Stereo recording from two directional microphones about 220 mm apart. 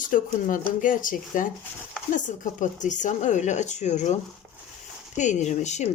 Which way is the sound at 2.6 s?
35° left (ahead or behind).